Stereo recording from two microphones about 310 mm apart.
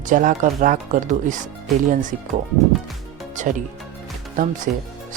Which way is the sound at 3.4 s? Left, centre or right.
Right.